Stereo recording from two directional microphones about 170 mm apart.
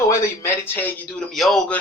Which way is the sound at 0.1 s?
15° left (ahead or behind).